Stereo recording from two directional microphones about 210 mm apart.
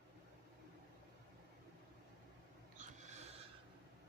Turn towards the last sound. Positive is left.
turn(degrees=-30)  # may be behind; listen again after turning